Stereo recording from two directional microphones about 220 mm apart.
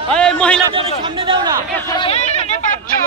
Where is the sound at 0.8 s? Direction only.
20° right (ahead or behind).